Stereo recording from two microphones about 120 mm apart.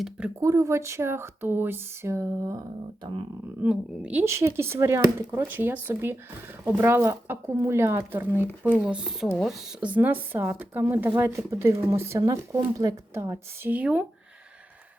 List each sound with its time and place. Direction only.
0.3 s speech: 25° right (ahead or behind)
3.6 s speech: 10° right (ahead or behind)